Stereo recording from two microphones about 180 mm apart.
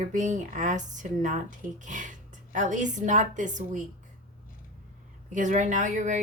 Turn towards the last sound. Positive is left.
turn(degrees=-45)  # may be behind; listen again after turning